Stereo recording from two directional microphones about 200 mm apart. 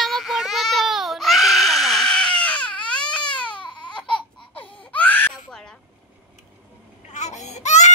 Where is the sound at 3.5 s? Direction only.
20° left (ahead or behind).